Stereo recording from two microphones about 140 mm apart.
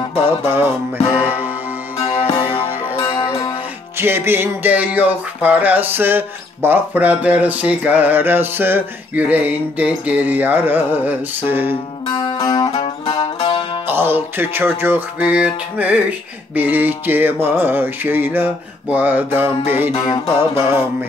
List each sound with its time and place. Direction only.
0.0 s music: 40° left (ahead or behind)
0.3 s music: 15° right (ahead or behind)
2.0 s music: 45° left (ahead or behind)
2.2 s music: 35° left (ahead or behind)
4.0 s music: 15° right (ahead or behind)
11.7 s music: 35° left (ahead or behind)
13.8 s music: 15° right (ahead or behind)
19.9 s music: 30° left (ahead or behind)
20.3 s music: 15° right (ahead or behind)